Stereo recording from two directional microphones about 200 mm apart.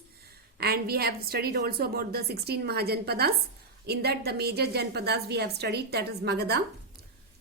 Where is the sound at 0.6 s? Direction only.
50° right (ahead or behind).